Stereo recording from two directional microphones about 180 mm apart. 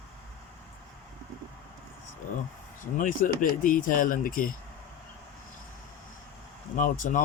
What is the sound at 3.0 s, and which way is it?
Speech, 45° left (ahead or behind).